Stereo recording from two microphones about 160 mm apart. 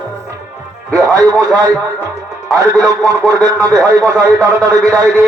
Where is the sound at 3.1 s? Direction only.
20° right (ahead or behind).